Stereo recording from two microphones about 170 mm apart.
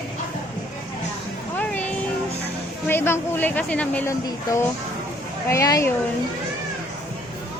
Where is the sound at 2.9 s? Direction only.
15° left (ahead or behind).